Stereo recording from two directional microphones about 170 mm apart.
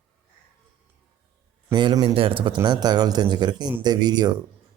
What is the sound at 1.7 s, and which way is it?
Speech, 25° right (ahead or behind).